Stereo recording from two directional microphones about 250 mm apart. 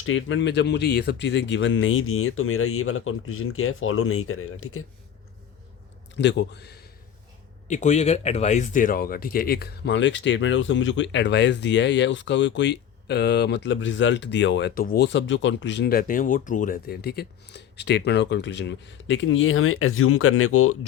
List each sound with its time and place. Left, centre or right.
0.0 s speech: left
6.1 s speech: left
7.7 s speech: left